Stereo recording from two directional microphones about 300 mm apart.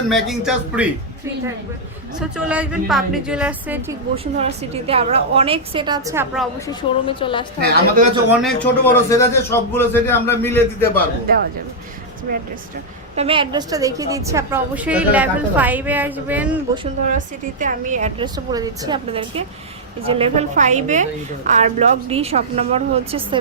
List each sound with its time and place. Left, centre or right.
0.1 s a woman's voice: centre
2.3 s a woman's voice: centre
4.1 s a woman's voice: centre
6.7 s a man's voice: centre
7.6 s a woman's voice: right
8.1 s a woman's voice: centre
9.0 s a man's voice: centre
11.3 s a woman's voice: right
13.1 s a woman's voice: centre
16.7 s a woman's voice: right